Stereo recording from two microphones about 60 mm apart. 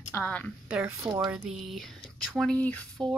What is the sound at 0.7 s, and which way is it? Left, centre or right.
Speech, right.